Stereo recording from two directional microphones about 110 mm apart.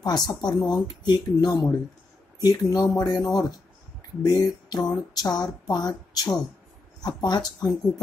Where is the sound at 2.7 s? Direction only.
35° left (ahead or behind).